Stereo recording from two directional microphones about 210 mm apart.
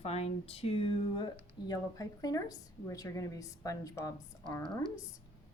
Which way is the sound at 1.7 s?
15° left (ahead or behind).